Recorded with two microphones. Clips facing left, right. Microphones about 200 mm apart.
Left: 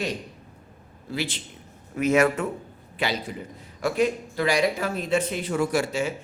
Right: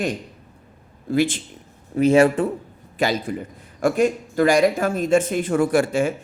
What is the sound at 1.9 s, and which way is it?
Speech, 30° right (ahead or behind).